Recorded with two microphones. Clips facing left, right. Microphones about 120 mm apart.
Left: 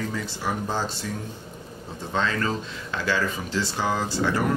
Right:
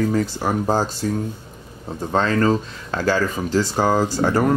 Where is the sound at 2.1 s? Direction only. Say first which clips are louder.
Right 8 dB; 45° right (ahead or behind).